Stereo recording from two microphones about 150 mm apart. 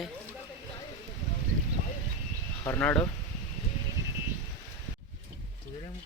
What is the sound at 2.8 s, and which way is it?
Speech, 10° left (ahead or behind).